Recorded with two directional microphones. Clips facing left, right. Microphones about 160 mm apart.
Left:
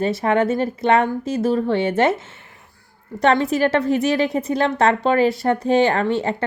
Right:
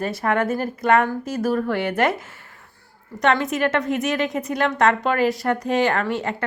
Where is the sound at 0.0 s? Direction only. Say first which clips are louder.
Left 4 dB; 25° left (ahead or behind).